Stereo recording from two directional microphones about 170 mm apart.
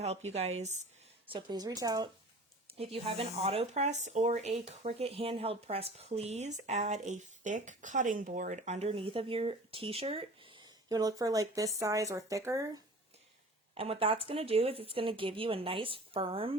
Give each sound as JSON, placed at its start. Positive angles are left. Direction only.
{"t": 0.0, "sound": "speech", "side_deg": -40}
{"t": 1.3, "sound": "speech", "side_deg": -25}
{"t": 2.9, "sound": "speech", "side_deg": -35}
{"t": 13.7, "sound": "speech", "side_deg": -35}